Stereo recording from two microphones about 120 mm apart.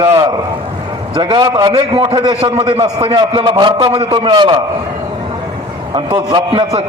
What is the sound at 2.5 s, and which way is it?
A man's voice, 55° right (ahead or behind).